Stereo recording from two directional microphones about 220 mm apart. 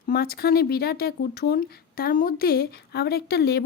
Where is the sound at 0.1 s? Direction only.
45° left (ahead or behind).